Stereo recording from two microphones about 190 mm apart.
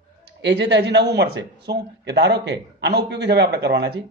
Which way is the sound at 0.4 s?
65° right (ahead or behind).